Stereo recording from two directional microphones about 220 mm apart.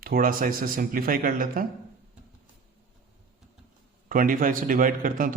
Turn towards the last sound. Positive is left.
turn(degrees=-40)  # may be behind; listen again after turning